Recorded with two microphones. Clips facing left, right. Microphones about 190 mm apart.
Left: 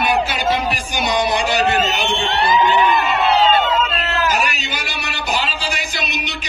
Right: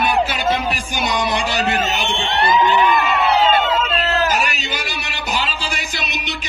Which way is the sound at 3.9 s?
35° right (ahead or behind).